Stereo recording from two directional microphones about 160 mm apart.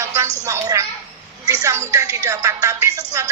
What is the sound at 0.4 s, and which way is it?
Speech, 20° right (ahead or behind).